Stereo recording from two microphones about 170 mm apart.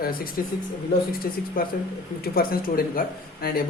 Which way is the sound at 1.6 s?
55° left (ahead or behind).